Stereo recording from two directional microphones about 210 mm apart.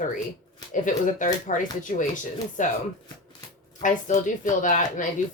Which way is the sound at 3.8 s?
35° left (ahead or behind).